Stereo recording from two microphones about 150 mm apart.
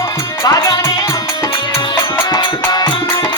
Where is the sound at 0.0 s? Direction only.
20° left (ahead or behind).